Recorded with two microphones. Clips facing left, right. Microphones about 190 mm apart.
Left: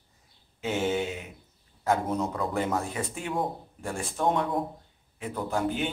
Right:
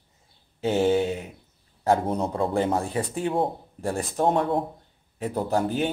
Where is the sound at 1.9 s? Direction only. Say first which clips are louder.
Right 4 dB; 35° right (ahead or behind).